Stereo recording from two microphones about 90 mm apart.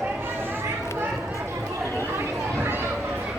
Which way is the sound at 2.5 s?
20° right (ahead or behind).